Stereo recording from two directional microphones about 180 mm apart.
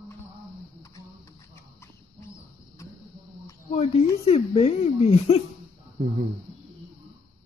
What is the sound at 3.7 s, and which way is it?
Speech, 35° left (ahead or behind).